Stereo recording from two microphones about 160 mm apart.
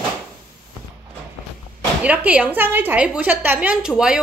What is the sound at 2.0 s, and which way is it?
A woman's voice, 10° right (ahead or behind).